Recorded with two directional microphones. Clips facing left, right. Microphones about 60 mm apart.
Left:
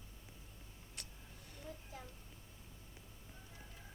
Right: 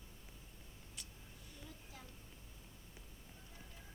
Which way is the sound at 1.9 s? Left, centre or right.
Left.